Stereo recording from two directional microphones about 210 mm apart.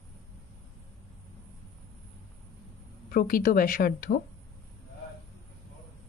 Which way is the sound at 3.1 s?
45° left (ahead or behind).